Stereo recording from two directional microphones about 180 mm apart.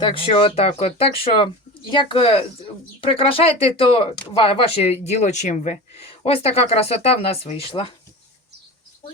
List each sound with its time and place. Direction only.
0.0 s speech: 30° left (ahead or behind)